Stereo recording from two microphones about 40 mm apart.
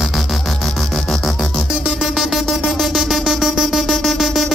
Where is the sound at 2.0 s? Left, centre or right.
Centre.